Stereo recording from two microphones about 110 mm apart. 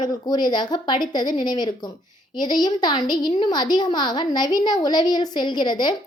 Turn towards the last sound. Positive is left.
turn(degrees=40)  # may be behind; listen again after turning